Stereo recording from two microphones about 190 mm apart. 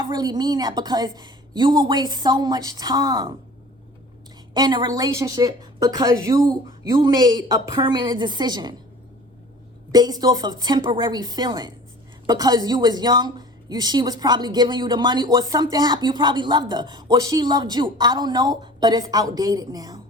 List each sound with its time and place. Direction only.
0.0 s a woman's voice: 20° right (ahead or behind)
4.5 s a woman's voice: 25° right (ahead or behind)
9.9 s a woman's voice: 20° right (ahead or behind)